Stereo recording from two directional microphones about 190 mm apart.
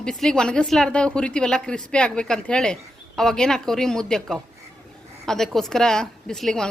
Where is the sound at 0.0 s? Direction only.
5° left (ahead or behind).